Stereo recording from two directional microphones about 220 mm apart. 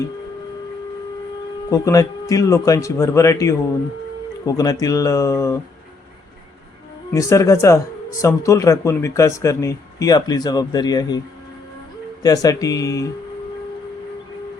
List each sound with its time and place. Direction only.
1.7 s speech: 15° left (ahead or behind)
7.1 s speech: 15° left (ahead or behind)
12.2 s speech: 15° left (ahead or behind)